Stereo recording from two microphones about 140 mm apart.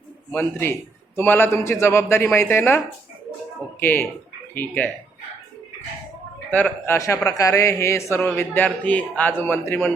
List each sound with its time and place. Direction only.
0.3 s a man's voice: 15° left (ahead or behind)
6.5 s a man's voice: 10° left (ahead or behind)